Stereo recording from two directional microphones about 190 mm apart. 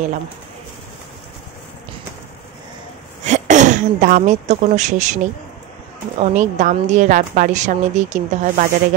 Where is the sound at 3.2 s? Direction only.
40° right (ahead or behind).